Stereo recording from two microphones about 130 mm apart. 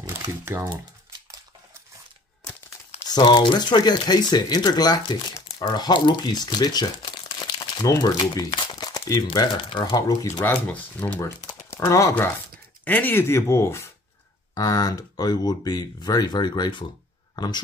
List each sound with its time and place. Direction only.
0.0 s speech: 20° right (ahead or behind)
3.1 s speech: 35° left (ahead or behind)
9.7 s speech: 40° left (ahead or behind)
9.9 s speech: 30° left (ahead or behind)
10.4 s speech: 15° left (ahead or behind); by 17.5 s 35° left (ahead or behind)